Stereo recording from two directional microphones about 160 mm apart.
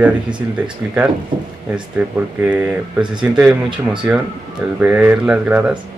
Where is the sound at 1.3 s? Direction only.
30° right (ahead or behind).